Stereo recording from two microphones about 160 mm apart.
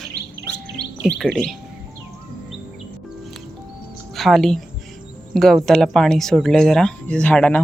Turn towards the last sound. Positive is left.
turn(degrees=10)  # may be behind; listen again after turning